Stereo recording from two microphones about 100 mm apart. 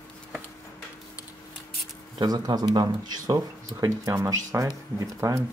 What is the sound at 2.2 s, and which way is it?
Speech, 40° right (ahead or behind).